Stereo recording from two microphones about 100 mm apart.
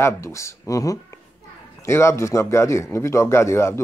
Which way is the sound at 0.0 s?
30° left (ahead or behind).